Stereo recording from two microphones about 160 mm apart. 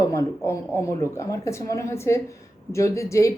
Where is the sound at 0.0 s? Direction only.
20° left (ahead or behind).